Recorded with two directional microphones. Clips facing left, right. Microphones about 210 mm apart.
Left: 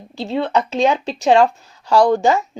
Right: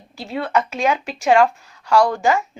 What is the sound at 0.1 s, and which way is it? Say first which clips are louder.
Speech: left 3 dB; 25° left (ahead or behind).